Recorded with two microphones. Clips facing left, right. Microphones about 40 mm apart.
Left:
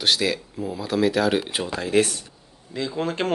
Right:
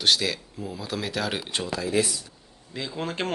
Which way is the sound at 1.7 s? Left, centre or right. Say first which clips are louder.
Left 5 dB; left.